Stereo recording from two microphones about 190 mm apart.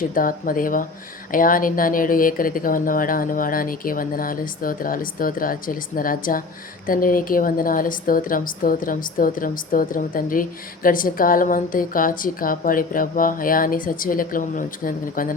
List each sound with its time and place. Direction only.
0.1 s speech: 45° left (ahead or behind)